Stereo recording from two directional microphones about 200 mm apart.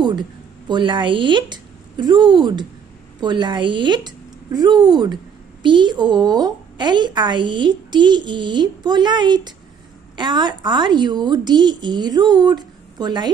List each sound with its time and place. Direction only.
0.0 s a woman's voice: 20° right (ahead or behind)